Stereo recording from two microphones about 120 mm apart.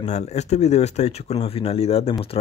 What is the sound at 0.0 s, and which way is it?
Speech, 70° left (ahead or behind).